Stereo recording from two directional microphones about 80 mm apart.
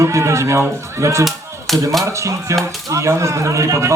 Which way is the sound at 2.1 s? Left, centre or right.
Right.